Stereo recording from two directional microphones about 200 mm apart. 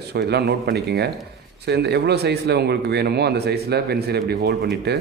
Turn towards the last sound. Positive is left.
turn(degrees=-55)  # may be behind; listen again after turning